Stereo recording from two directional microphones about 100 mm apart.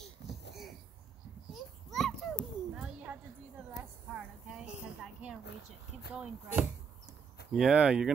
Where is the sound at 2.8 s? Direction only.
15° right (ahead or behind).